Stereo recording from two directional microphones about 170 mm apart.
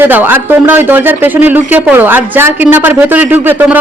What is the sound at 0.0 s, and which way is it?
Speech, 10° right (ahead or behind).